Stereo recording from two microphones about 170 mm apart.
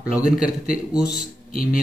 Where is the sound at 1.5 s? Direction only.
55° left (ahead or behind).